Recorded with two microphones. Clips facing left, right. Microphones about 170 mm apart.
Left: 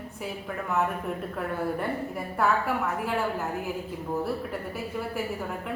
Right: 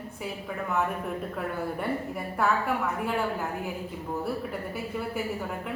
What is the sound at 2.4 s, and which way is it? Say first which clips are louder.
Speech: left 1 dB; centre (ahead or behind).